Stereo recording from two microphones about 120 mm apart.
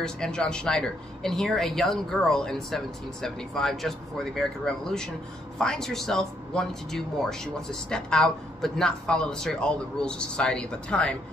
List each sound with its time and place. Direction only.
0.0 s a man's voice: 5° left (ahead or behind)